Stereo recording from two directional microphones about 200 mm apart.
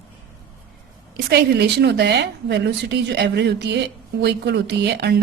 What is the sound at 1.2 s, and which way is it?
A woman's voice, 55° right (ahead or behind).